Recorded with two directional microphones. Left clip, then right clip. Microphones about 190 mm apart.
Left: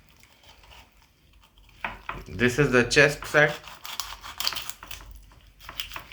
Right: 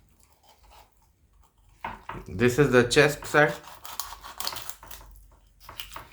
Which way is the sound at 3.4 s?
15° right (ahead or behind).